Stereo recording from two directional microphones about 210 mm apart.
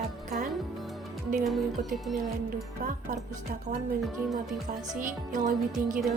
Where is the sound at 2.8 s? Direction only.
35° right (ahead or behind).